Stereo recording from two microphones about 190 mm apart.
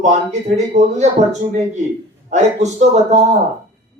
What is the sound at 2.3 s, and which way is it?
Speech, 35° right (ahead or behind).